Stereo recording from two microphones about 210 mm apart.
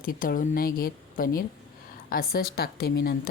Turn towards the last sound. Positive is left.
turn(degrees=45)  # may be behind; listen again after turning